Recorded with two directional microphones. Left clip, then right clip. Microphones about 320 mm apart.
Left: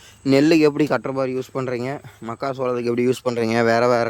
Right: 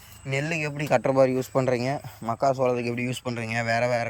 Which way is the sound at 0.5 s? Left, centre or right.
Centre.